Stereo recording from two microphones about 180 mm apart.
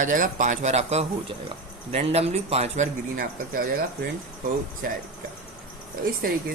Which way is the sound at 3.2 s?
50° right (ahead or behind).